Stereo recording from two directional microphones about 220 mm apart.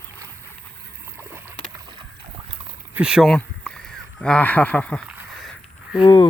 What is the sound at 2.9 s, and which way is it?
Speech, 5° right (ahead or behind).